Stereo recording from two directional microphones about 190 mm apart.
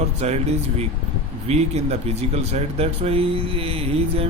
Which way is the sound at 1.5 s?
35° right (ahead or behind).